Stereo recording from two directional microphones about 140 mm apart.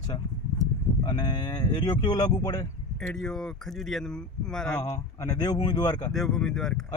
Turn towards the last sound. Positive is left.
turn(degrees=0)  # may be behind; listen again after turning